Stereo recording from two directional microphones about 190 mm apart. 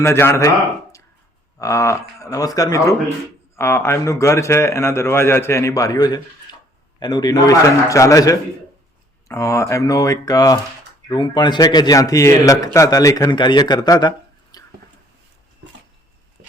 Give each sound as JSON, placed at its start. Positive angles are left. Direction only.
{"t": 0.0, "sound": "a man's voice", "side_deg": 15}
{"t": 1.5, "sound": "a man's voice", "side_deg": 15}
{"t": 14.5, "sound": "a sound", "side_deg": 20}